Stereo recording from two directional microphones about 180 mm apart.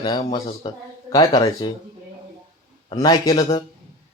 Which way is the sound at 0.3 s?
25° left (ahead or behind).